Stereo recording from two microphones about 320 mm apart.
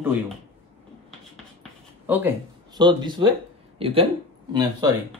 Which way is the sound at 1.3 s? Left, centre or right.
Centre.